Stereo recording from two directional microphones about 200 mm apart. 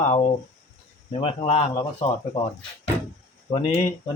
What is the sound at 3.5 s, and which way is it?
Speech, 30° left (ahead or behind).